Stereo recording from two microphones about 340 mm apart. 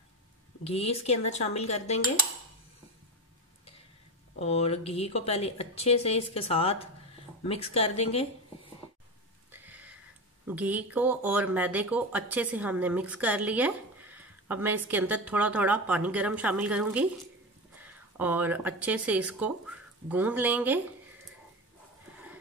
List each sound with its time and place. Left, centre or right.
0.7 s a woman's voice: centre
4.4 s a woman's voice: centre
9.5 s a sound: centre
10.4 s speech: centre